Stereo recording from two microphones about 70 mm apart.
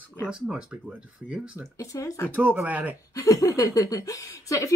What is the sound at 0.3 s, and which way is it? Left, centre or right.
Speech, centre.